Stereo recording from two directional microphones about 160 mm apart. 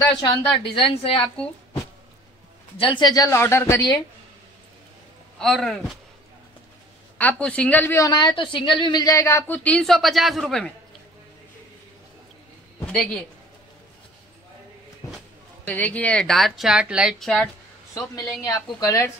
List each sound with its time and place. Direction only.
0.2 s a woman's voice: 35° left (ahead or behind)
2.8 s speech: 30° left (ahead or behind)
5.4 s a woman's voice: centre (ahead or behind)
7.2 s speech: 10° left (ahead or behind)
8.4 s speech: 30° left (ahead or behind); by 10.7 s centre (ahead or behind)
12.8 s a man's voice: 5° left (ahead or behind)
15.6 s a woman's voice: 10° left (ahead or behind)
17.9 s speech: 20° left (ahead or behind)